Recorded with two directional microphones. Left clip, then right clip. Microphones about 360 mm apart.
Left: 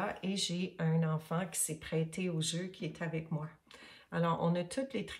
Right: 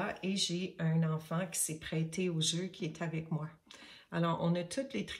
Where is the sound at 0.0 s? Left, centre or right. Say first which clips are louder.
Right 1 dB; centre.